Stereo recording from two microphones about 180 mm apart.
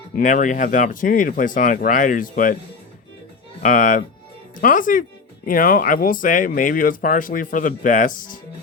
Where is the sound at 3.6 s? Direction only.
45° left (ahead or behind).